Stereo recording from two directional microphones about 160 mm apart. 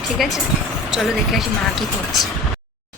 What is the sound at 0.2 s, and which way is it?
Speech, centre (ahead or behind).